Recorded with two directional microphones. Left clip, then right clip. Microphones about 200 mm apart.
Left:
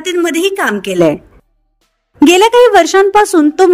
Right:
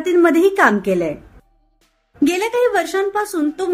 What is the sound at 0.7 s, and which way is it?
Speech, 45° left (ahead or behind).